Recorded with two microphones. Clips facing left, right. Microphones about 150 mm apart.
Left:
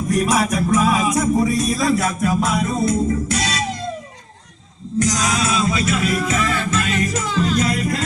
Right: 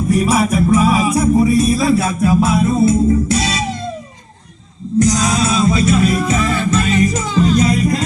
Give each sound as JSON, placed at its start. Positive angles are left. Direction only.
{"t": 0.1, "sound": "music", "side_deg": -5}
{"t": 5.0, "sound": "music", "side_deg": -30}